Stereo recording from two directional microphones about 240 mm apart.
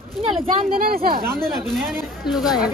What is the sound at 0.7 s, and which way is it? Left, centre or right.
Speech, right.